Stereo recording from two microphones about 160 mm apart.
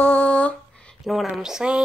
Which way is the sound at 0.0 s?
10° left (ahead or behind).